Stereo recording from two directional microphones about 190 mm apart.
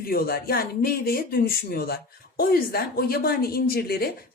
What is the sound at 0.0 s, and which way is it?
A woman's voice, 50° left (ahead or behind).